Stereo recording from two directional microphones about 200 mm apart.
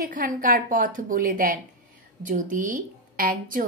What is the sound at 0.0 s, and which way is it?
A woman's voice, 40° right (ahead or behind).